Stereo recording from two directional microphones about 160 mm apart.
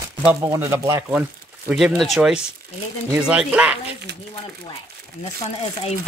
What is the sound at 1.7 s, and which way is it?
Speech, 5° right (ahead or behind).